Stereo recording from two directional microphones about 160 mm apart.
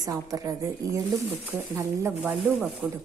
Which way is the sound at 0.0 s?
20° right (ahead or behind).